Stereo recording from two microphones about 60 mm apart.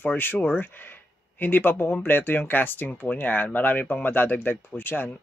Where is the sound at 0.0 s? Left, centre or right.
Left.